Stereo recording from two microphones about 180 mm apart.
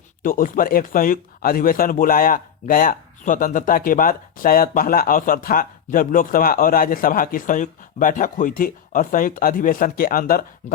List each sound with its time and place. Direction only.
0.2 s speech: 50° left (ahead or behind)